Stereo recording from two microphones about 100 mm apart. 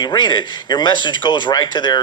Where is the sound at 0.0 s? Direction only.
50° left (ahead or behind).